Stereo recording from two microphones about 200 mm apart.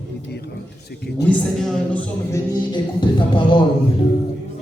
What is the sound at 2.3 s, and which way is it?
A man's voice, 20° left (ahead or behind).